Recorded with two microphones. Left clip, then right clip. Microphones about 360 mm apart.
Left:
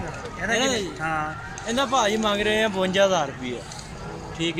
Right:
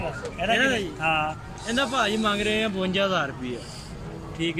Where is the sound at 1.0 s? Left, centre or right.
Centre.